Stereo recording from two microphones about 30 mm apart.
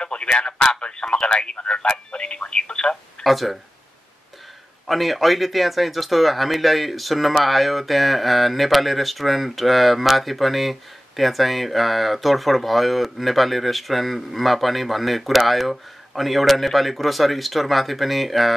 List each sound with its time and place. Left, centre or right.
0.0 s a sound: left
0.7 s radio: left
1.2 s speech: left
3.3 s speech: centre
4.8 s speech: centre